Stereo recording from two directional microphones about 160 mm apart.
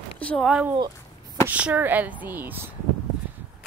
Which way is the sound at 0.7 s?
25° right (ahead or behind).